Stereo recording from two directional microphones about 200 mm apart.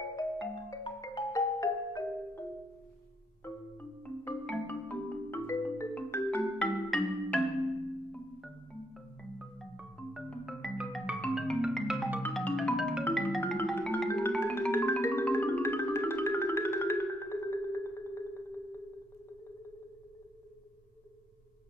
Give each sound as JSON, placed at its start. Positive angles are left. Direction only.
{"t": 0.1, "sound": "music", "side_deg": 20}
{"t": 4.0, "sound": "music", "side_deg": 5}
{"t": 9.4, "sound": "marimba", "side_deg": -5}
{"t": 12.2, "sound": "music", "side_deg": 5}